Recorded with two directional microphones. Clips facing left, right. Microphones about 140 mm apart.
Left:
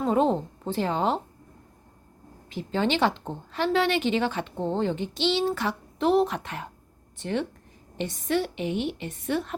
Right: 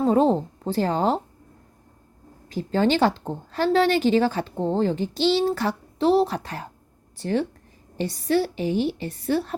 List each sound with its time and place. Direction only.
0.0 s speech: 35° right (ahead or behind)
2.5 s speech: 40° right (ahead or behind)